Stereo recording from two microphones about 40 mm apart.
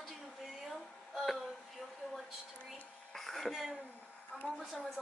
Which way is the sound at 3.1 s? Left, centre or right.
Centre.